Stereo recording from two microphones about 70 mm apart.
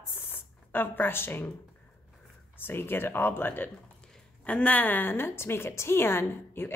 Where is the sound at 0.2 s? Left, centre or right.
Left.